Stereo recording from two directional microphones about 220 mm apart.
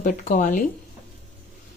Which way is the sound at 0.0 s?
35° left (ahead or behind).